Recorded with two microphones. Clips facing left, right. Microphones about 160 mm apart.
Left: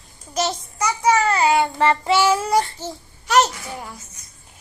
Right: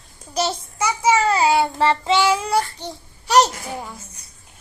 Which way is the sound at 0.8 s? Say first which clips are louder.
Even; 5° right (ahead or behind).